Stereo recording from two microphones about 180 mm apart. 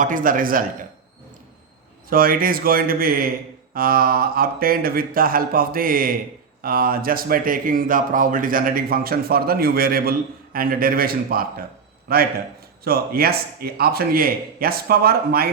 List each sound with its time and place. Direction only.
0.0 s speech: 50° right (ahead or behind)
2.0 s speech: 50° right (ahead or behind)